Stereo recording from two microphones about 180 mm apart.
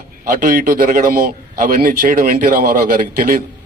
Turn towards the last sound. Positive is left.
turn(degrees=-55)  # may be behind; listen again after turning